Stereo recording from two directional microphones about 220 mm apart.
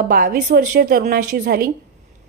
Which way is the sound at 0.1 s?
40° right (ahead or behind).